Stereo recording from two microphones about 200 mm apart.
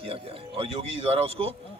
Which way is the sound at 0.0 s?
30° right (ahead or behind).